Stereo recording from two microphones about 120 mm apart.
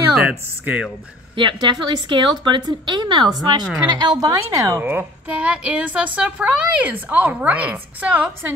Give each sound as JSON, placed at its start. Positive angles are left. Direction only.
{"t": 0.1, "sound": "speech", "side_deg": -10}
{"t": 1.3, "sound": "a woman's voice", "side_deg": -40}